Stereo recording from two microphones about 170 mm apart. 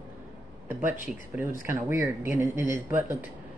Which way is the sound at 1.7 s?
15° right (ahead or behind).